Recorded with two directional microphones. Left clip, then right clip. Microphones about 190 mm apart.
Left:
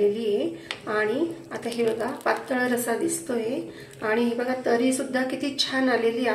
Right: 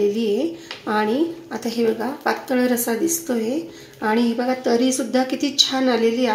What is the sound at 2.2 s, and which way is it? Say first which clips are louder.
Speech: right 5 dB; 60° right (ahead or behind).